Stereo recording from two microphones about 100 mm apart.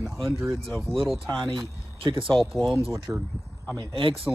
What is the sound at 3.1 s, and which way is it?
Speech, 25° right (ahead or behind).